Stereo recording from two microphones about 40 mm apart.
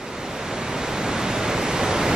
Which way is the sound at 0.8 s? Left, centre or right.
Centre.